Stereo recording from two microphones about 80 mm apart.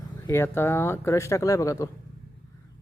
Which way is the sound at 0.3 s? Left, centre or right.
Left.